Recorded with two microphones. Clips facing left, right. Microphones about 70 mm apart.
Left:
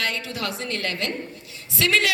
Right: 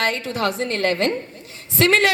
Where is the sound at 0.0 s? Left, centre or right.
Right.